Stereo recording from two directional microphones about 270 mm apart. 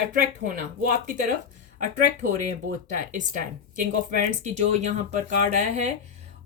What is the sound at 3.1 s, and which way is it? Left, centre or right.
Speech, right.